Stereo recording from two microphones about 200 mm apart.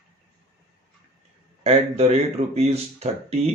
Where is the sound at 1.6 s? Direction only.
30° right (ahead or behind).